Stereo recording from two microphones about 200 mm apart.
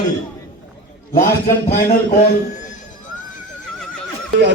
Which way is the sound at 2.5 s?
40° left (ahead or behind).